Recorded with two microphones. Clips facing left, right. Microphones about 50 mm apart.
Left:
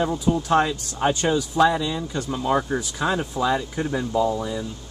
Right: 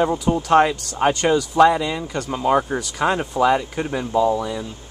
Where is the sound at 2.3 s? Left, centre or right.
Right.